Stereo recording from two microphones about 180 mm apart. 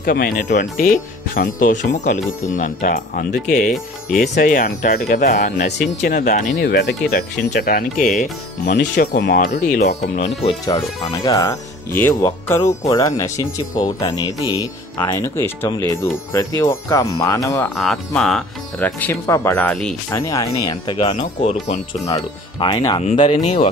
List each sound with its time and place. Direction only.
0.0 s speech: 55° left (ahead or behind)
6.7 s speech: 70° left (ahead or behind)
7.5 s speech: 55° left (ahead or behind)
10.1 s speech: 40° left (ahead or behind)
10.6 s speech: 20° left (ahead or behind)
17.7 s speech: 5° left (ahead or behind)
20.1 s speech: 15° left (ahead or behind); by 21.7 s 35° left (ahead or behind)
22.0 s speech: 25° left (ahead or behind)